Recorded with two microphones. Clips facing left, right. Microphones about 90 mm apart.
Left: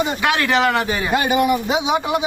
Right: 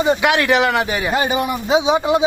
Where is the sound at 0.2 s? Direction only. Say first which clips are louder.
Right 2 dB; 20° right (ahead or behind).